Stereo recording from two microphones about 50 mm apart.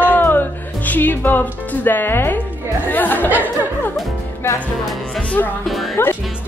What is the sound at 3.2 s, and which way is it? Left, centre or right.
Speech, right.